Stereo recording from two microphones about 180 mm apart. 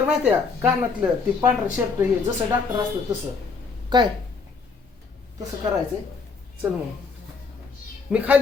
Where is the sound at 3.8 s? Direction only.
25° right (ahead or behind).